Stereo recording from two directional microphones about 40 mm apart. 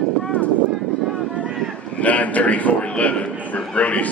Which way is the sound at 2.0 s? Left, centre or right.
Left.